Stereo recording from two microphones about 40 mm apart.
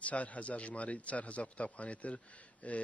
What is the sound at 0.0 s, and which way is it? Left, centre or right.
Speech, left.